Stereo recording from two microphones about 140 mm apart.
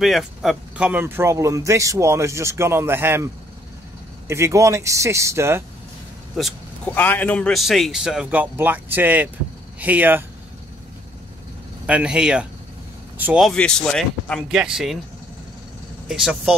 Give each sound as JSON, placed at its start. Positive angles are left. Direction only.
{"t": 0.0, "sound": "speech", "side_deg": 0}
{"t": 4.3, "sound": "speech", "side_deg": -20}
{"t": 6.3, "sound": "a sound", "side_deg": 0}
{"t": 6.9, "sound": "a man's voice", "side_deg": 15}
{"t": 11.8, "sound": "speech", "side_deg": -10}
{"t": 13.4, "sound": "a man's voice", "side_deg": 5}
{"t": 16.1, "sound": "a man's voice", "side_deg": -5}